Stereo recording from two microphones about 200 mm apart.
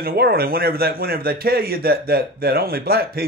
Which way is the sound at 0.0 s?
50° right (ahead or behind).